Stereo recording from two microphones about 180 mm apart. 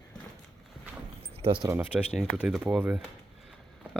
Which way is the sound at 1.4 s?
30° right (ahead or behind).